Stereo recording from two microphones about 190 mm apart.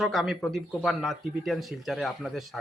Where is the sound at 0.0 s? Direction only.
Centre (ahead or behind).